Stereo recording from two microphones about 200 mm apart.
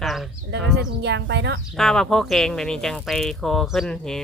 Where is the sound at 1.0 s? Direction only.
60° right (ahead or behind).